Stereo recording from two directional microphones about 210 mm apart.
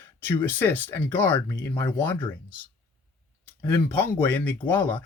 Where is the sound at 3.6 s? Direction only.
10° left (ahead or behind).